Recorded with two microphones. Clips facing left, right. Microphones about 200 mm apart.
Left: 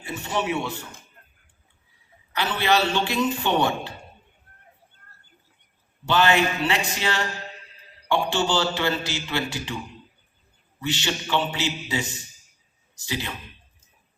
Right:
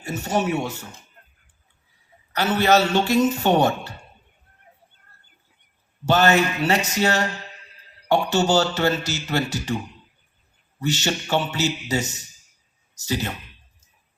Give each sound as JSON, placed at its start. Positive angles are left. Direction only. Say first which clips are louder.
{"t": 0.0, "sound": "a man's voice", "louder": "right 4 dB", "side_deg": -45}
{"t": 2.3, "sound": "a man's voice", "louder": "right 5 dB", "side_deg": -45}
{"t": 6.1, "sound": "a man's voice", "louder": "right 3 dB", "side_deg": -45}
{"t": 10.8, "sound": "a man's voice", "louder": "right 3 dB", "side_deg": -45}